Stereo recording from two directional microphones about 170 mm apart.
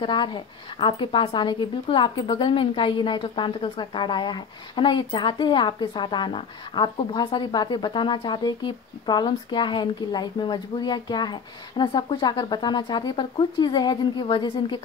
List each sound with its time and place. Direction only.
0.0 s a woman's voice: 25° left (ahead or behind)